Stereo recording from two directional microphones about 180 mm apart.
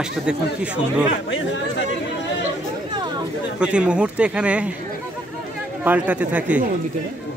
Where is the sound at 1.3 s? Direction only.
90° left.